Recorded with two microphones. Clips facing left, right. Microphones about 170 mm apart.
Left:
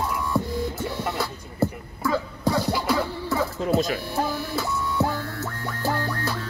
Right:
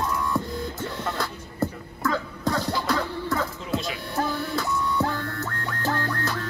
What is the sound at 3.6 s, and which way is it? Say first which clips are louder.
Speech: left 7 dB; 45° left (ahead or behind).